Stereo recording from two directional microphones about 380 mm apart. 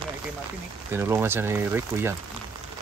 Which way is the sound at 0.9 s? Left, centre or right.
Centre.